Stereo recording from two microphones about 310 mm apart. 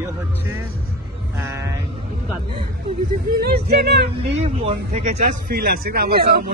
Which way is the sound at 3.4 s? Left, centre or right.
Right.